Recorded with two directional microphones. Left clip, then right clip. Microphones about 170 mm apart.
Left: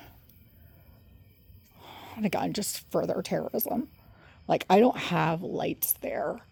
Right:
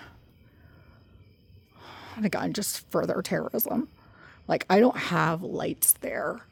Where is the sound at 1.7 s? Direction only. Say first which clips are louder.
Right 2 dB; 15° right (ahead or behind).